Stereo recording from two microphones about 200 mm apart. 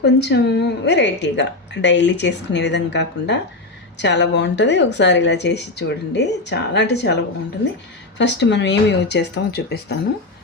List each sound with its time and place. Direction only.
0.0 s a woman's voice: 55° left (ahead or behind)
8.4 s a woman's voice: 60° left (ahead or behind)